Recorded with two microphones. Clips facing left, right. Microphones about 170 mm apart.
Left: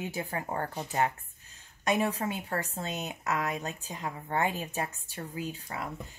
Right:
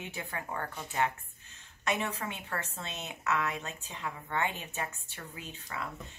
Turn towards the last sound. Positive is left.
turn(degrees=35)  # may be behind; listen again after turning